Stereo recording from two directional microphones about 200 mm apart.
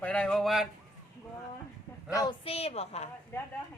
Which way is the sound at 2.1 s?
20° left (ahead or behind).